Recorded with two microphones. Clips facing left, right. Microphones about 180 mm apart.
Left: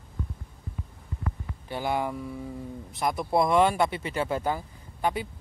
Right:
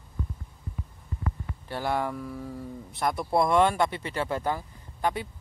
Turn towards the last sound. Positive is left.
turn(degrees=10)  # may be behind; listen again after turning